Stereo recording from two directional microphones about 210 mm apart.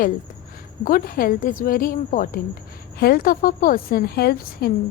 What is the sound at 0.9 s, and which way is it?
A woman's voice, 45° left (ahead or behind).